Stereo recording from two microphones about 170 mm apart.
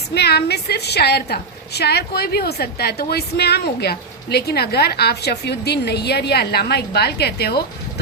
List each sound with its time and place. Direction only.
0.1 s a woman's voice: 75° left (ahead or behind)